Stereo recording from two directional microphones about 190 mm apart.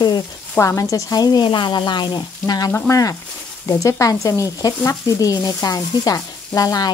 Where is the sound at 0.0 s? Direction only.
20° left (ahead or behind).